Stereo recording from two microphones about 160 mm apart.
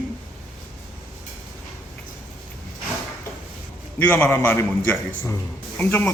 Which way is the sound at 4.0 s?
15° left (ahead or behind).